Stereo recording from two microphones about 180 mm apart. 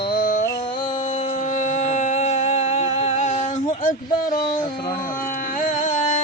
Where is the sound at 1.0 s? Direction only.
40° left (ahead or behind).